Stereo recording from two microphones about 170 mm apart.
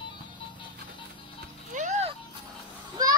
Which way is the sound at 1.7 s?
45° right (ahead or behind).